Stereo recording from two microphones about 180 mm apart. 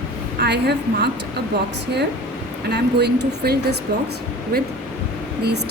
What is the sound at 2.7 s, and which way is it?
Speech, 70° right (ahead or behind).